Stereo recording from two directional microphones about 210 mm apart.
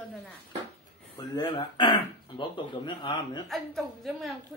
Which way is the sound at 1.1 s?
20° left (ahead or behind).